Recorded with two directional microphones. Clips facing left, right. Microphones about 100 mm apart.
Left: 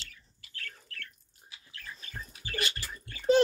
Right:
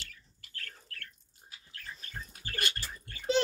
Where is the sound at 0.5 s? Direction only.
40° right (ahead or behind).